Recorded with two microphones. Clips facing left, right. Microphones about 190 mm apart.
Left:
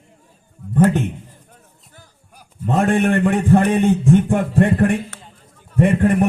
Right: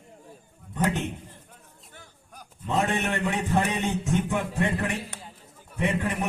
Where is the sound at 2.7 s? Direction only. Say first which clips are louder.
Left 9 dB; 50° left (ahead or behind).